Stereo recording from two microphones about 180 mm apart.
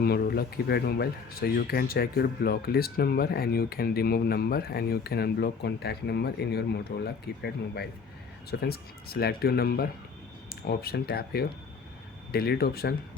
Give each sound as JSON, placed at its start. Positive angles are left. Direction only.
{"t": 0.0, "sound": "speech", "side_deg": 60}